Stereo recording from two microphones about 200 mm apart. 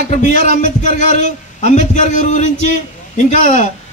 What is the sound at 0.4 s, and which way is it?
A man's voice, 40° left (ahead or behind).